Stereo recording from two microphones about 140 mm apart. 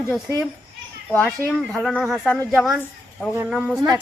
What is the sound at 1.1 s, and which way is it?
Speech, 10° left (ahead or behind).